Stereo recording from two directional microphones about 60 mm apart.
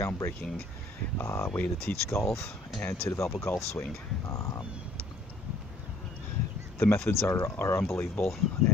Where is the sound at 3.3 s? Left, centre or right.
Left.